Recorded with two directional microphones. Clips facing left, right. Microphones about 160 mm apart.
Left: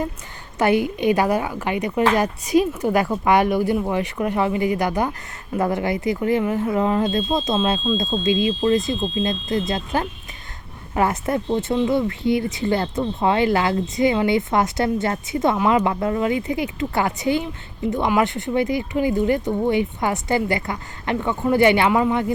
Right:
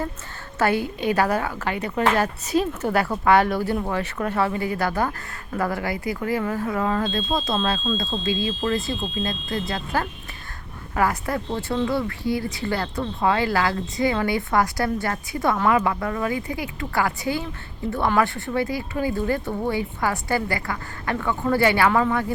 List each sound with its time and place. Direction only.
0.6 s speech: 15° left (ahead or behind)